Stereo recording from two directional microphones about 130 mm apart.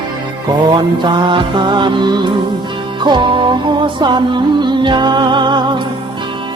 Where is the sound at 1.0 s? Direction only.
35° right (ahead or behind).